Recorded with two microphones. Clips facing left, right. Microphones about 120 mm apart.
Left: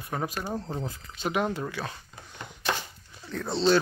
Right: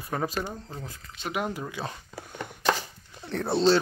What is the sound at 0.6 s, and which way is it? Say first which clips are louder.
Speech: left 6 dB; 25° left (ahead or behind).